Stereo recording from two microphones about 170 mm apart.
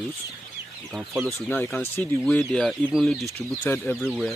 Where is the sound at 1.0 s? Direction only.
5° right (ahead or behind).